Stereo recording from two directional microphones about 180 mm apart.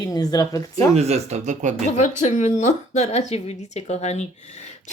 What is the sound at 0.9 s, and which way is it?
Speech, 35° right (ahead or behind).